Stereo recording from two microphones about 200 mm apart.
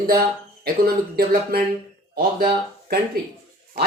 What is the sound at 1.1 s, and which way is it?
Speech, 50° right (ahead or behind).